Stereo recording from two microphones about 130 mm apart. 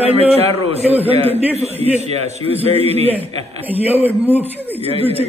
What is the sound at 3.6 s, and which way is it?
Speech, 15° right (ahead or behind).